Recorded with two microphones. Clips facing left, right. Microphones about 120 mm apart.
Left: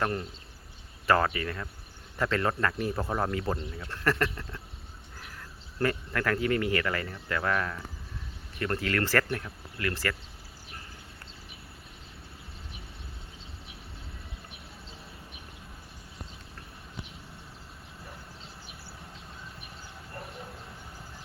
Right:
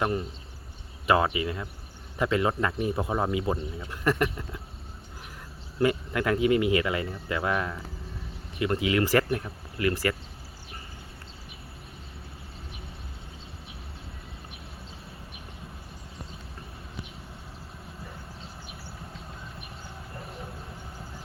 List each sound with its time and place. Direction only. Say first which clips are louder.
0.0 s speech: right 3 dB; 10° right (ahead or behind)
5.8 s speech: right 4 dB; 15° right (ahead or behind)